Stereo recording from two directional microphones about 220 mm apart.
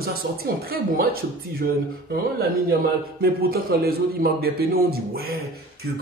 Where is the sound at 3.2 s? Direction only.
45° right (ahead or behind).